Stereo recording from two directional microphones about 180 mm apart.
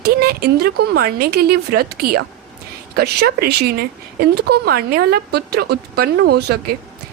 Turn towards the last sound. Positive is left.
turn(degrees=-65)  # may be behind; listen again after turning